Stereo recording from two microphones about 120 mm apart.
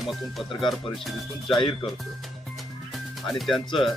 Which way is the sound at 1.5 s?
45° left (ahead or behind).